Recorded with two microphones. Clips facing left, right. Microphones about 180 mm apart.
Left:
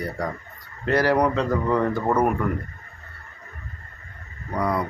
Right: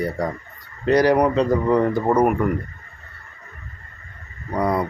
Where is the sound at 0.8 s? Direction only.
15° right (ahead or behind).